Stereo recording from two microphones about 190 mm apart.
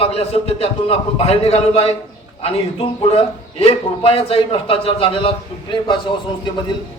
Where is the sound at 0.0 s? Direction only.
30° left (ahead or behind).